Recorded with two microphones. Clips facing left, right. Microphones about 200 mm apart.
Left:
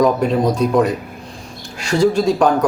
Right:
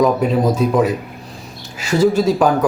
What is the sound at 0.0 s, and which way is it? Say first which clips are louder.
Speech: even; 5° right (ahead or behind).